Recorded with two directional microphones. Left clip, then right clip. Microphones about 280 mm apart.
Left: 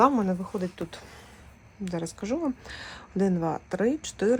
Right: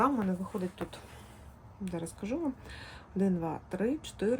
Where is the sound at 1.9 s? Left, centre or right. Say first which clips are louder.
Left 6 dB; left.